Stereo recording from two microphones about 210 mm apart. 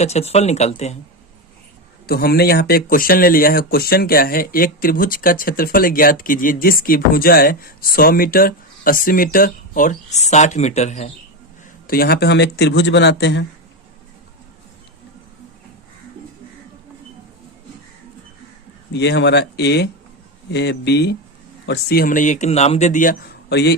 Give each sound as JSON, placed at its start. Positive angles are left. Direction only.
{"t": 0.0, "sound": "speech", "side_deg": 30}
{"t": 2.0, "sound": "speech", "side_deg": 45}
{"t": 11.9, "sound": "speech", "side_deg": 45}
{"t": 18.9, "sound": "speech", "side_deg": 55}
{"t": 23.5, "sound": "speech", "side_deg": 50}